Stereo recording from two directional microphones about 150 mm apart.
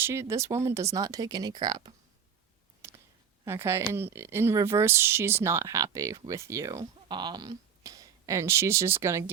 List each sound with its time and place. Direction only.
0.0 s speech: 15° right (ahead or behind)
2.8 s clicking: 20° right (ahead or behind)
3.4 s speech: 20° right (ahead or behind)